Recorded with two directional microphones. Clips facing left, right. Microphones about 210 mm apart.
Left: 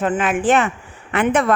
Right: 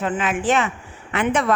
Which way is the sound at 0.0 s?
55° left (ahead or behind).